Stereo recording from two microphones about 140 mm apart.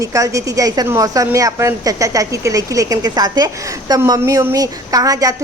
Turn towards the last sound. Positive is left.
turn(degrees=-25)  # may be behind; listen again after turning